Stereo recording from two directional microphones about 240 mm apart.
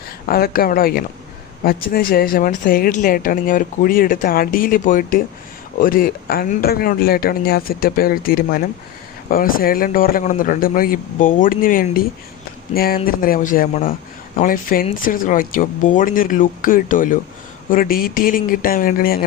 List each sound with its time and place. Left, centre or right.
0.3 s speech: left